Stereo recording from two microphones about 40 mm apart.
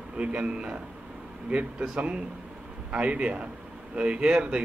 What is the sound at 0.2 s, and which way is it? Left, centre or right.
A man's voice, right.